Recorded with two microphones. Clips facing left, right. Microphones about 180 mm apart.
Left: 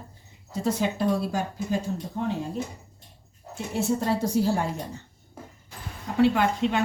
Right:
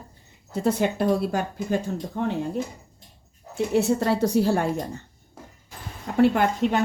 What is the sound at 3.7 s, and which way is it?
Speech, 70° right (ahead or behind).